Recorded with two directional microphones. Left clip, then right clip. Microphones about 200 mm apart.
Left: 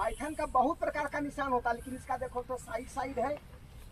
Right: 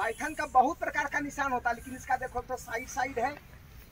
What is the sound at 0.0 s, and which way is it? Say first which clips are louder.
Speech: right 2 dB; 15° left (ahead or behind).